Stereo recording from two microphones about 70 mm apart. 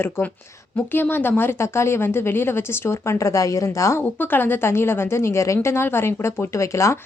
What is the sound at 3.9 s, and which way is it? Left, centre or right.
Speech, left.